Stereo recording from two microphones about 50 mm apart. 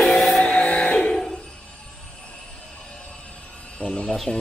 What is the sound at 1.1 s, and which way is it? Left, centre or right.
Music, centre.